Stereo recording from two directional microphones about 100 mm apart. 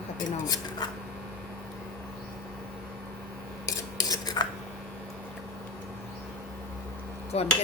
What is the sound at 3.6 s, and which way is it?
Cutlery, 40° left (ahead or behind).